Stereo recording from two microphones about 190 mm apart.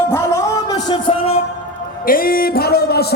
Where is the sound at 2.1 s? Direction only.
50° left (ahead or behind).